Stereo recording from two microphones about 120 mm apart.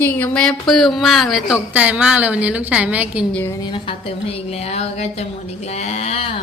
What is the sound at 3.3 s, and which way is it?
Speech, 20° left (ahead or behind).